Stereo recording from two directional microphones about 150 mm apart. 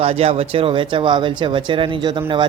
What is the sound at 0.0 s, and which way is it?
Speech, 40° right (ahead or behind).